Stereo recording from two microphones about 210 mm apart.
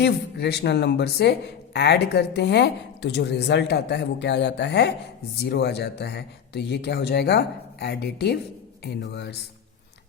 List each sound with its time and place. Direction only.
0.0 s speech: 55° left (ahead or behind)